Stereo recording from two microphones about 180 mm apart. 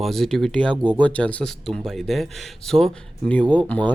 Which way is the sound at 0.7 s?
25° right (ahead or behind).